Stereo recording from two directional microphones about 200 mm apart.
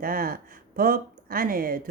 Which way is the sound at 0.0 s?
45° right (ahead or behind).